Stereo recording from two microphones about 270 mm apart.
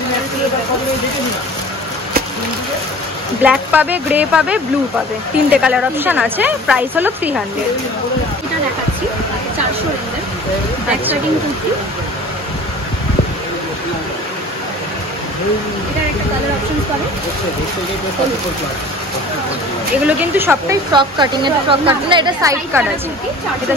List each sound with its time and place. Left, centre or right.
3.4 s speech: centre
20.1 s speech: centre